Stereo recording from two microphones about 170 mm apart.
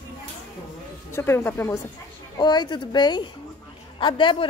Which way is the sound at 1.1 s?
15° left (ahead or behind).